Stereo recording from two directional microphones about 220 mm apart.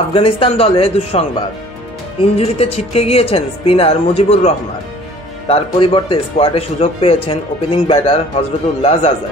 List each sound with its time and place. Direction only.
0.1 s speech: 25° left (ahead or behind)
2.3 s speech: 25° left (ahead or behind)